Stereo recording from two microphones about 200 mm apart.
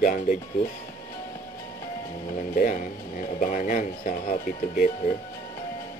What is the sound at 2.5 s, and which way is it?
Speech, 40° left (ahead or behind).